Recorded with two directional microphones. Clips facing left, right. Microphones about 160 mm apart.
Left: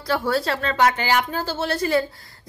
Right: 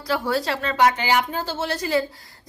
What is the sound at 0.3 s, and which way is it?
A woman's voice, 15° right (ahead or behind).